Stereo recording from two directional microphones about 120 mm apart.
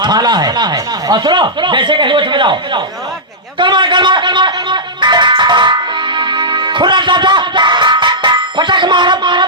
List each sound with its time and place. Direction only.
0.0 s speech: 35° right (ahead or behind)